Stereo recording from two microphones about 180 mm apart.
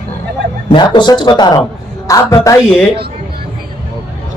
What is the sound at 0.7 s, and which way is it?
A man's voice, 25° left (ahead or behind).